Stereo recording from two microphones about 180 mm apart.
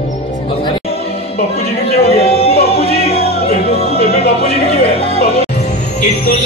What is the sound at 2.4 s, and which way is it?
Music, 60° left (ahead or behind).